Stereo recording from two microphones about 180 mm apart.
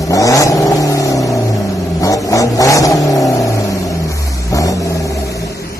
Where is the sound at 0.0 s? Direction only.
20° left (ahead or behind).